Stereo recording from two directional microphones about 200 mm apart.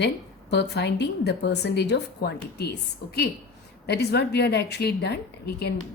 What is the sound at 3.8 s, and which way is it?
A woman's voice, 55° left (ahead or behind).